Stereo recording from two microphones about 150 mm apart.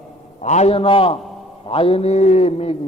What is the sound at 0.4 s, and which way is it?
A man's voice, 50° left (ahead or behind).